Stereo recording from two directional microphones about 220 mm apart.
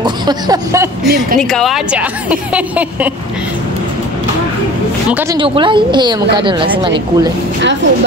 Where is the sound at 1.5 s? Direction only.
Centre (ahead or behind).